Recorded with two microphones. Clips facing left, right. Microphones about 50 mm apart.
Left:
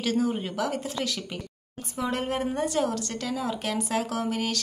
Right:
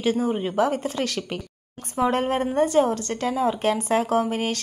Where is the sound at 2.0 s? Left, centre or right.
Right.